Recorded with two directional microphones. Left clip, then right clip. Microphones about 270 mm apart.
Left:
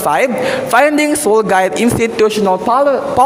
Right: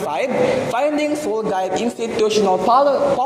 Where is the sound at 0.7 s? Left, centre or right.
Left.